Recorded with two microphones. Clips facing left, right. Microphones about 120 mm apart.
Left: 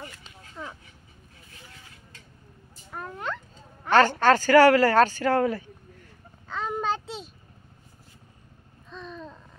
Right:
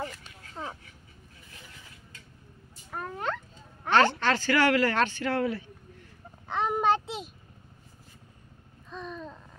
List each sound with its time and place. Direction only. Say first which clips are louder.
0.6 s speech: right 1 dB; 30° right (ahead or behind)
3.9 s speech: left 4 dB; 45° left (ahead or behind)
6.4 s a sound: right 3 dB; 20° right (ahead or behind)
8.9 s babbling: right 1 dB; 5° right (ahead or behind)